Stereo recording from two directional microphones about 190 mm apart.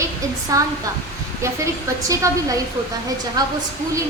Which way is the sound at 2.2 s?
20° right (ahead or behind).